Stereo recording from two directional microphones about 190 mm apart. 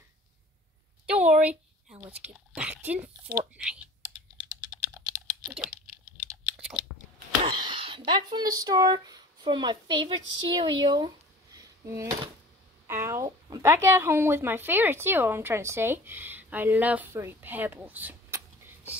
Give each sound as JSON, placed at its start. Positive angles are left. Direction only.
{"t": 1.0, "sound": "a sound", "side_deg": -5}
{"t": 1.4, "sound": "a woman's voice", "side_deg": -5}
{"t": 4.6, "sound": "typing", "side_deg": -5}
{"t": 6.5, "sound": "crunch", "side_deg": -10}
{"t": 7.5, "sound": "speech", "side_deg": -25}
{"t": 11.5, "sound": "a sound", "side_deg": -15}
{"t": 12.8, "sound": "speech", "side_deg": -15}